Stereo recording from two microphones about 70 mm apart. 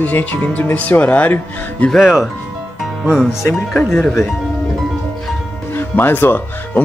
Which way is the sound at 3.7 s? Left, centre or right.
Centre.